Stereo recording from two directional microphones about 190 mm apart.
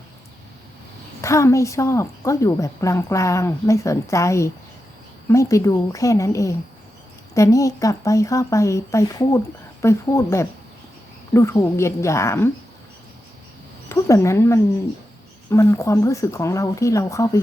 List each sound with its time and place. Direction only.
1.2 s a woman's voice: 15° left (ahead or behind)
13.8 s a woman's voice: 15° left (ahead or behind)